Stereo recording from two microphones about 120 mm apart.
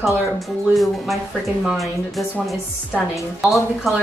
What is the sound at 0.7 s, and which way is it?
Speech, centre (ahead or behind).